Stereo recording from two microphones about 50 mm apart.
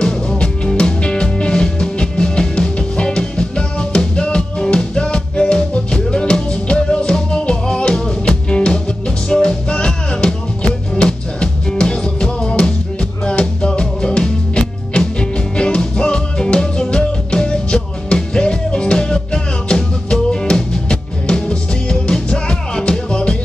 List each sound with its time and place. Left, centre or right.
0.0 s music: centre